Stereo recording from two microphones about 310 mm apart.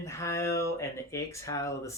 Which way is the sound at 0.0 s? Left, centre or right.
Centre.